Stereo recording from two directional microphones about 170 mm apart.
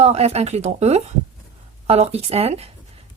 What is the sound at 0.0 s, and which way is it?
Speech, 40° right (ahead or behind).